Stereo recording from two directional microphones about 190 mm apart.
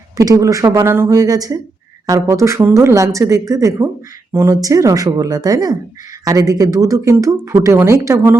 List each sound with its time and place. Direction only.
0.2 s speech: 15° right (ahead or behind)